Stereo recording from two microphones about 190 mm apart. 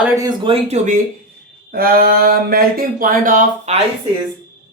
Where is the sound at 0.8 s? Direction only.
40° right (ahead or behind).